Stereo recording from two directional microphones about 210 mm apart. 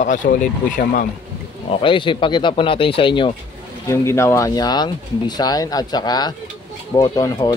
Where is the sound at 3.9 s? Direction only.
15° left (ahead or behind).